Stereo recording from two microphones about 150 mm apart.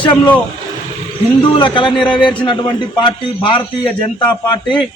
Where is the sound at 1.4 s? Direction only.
30° left (ahead or behind).